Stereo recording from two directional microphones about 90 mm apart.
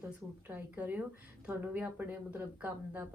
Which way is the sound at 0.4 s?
20° right (ahead or behind).